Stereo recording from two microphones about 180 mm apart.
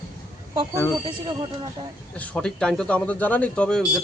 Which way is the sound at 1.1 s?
25° right (ahead or behind).